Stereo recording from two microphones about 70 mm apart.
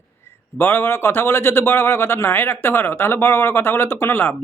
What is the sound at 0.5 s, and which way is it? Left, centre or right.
Speech, left.